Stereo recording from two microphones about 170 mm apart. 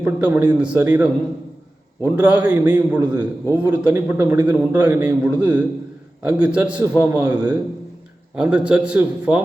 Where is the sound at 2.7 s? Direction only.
5° right (ahead or behind).